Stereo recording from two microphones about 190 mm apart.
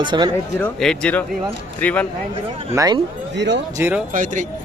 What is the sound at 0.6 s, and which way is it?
Speech, 5° left (ahead or behind).